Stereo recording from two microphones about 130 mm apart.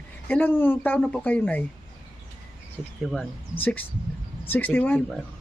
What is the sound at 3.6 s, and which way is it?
A man's voice, 15° left (ahead or behind).